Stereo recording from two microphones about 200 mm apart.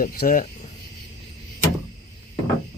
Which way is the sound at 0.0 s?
45° left (ahead or behind).